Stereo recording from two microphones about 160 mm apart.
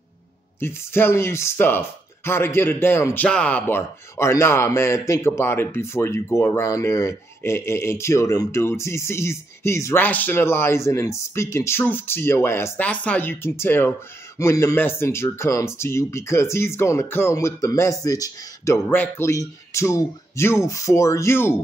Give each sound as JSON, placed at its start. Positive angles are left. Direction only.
{"t": 0.6, "sound": "speech", "side_deg": 15}